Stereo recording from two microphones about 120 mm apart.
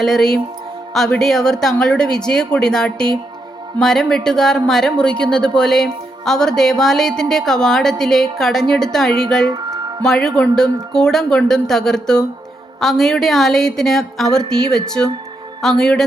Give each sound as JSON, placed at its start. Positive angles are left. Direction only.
{"t": 0.0, "sound": "speech", "side_deg": 5}
{"t": 9.5, "sound": "music", "side_deg": -30}
{"t": 10.0, "sound": "speech", "side_deg": 5}